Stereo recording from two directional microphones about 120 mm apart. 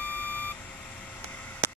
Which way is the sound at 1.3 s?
15° left (ahead or behind).